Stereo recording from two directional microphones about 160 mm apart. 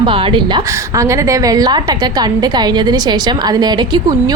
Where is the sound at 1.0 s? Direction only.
20° right (ahead or behind).